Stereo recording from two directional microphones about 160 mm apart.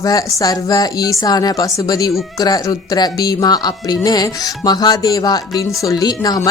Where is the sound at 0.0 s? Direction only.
25° left (ahead or behind).